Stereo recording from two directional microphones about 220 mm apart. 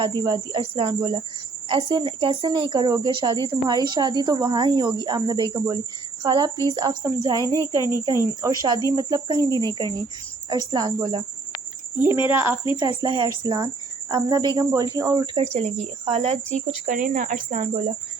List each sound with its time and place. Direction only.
0.0 s a woman's voice: 20° right (ahead or behind)
7.4 s speech: 15° left (ahead or behind)
8.2 s a woman's voice: 15° right (ahead or behind)
12.2 s speech: 10° right (ahead or behind)
12.7 s a woman's voice: 20° right (ahead or behind); by 17.7 s 35° right (ahead or behind)